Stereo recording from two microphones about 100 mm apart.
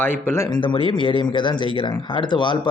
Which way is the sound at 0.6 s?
60° left (ahead or behind).